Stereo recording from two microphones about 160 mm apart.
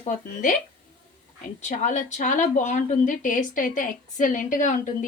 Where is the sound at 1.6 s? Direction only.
50° left (ahead or behind).